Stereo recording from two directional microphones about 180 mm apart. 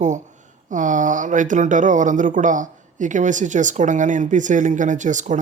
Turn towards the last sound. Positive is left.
turn(degrees=-45)  # may be behind; listen again after turning